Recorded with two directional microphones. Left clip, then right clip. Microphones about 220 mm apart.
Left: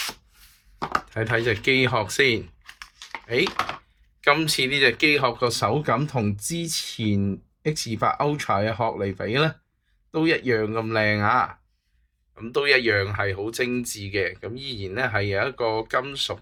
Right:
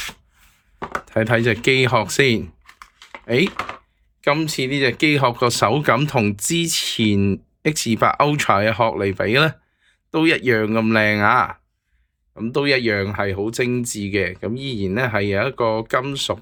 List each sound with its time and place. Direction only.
1.1 s speech: 30° right (ahead or behind)
4.2 s speech: 15° right (ahead or behind); by 11.5 s 35° right (ahead or behind)
12.3 s speech: 20° right (ahead or behind)